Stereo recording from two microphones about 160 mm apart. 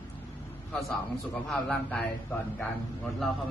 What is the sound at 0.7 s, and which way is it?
A man's voice, 5° left (ahead or behind).